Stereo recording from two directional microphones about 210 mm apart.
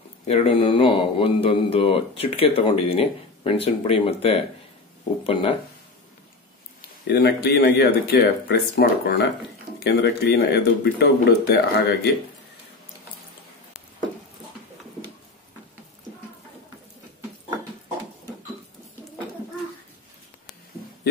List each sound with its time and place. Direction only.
0.3 s speech: 25° left (ahead or behind)
7.1 s speech: 50° left (ahead or behind)